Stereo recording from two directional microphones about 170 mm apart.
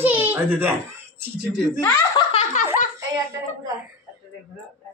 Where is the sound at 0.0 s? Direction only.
10° right (ahead or behind).